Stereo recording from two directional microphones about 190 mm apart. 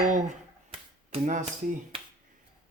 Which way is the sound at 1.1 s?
35° right (ahead or behind).